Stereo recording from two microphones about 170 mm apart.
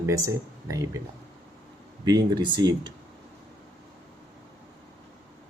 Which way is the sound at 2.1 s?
25° right (ahead or behind).